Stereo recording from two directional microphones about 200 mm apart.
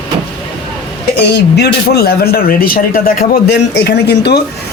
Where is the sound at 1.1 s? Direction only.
55° left (ahead or behind).